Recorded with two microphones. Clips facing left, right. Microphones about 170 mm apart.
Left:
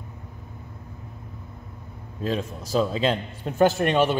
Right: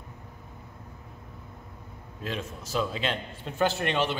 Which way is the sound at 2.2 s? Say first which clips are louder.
Left 7 dB; 35° left (ahead or behind).